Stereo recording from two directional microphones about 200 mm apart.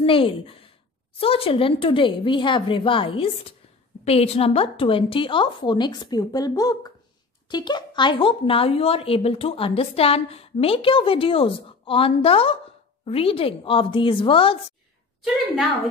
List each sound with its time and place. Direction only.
0.0 s a woman's voice: 25° left (ahead or behind)